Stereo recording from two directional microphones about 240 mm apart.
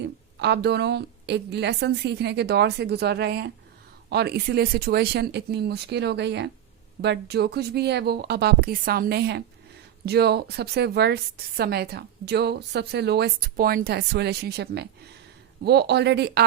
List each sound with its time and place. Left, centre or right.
0.3 s a woman's voice: right